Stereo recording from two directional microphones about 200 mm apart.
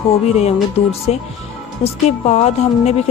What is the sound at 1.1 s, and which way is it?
Speech, 35° left (ahead or behind).